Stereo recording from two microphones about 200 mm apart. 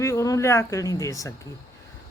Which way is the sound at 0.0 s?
15° left (ahead or behind).